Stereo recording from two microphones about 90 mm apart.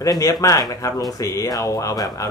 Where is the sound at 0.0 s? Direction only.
40° left (ahead or behind).